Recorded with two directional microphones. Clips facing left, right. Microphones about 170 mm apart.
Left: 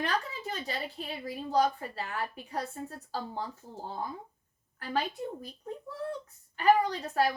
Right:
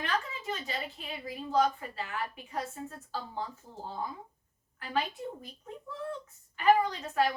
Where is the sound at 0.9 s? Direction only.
35° left (ahead or behind).